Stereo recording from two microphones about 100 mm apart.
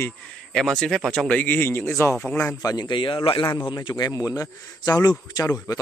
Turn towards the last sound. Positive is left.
turn(degrees=35)  # may be behind; listen again after turning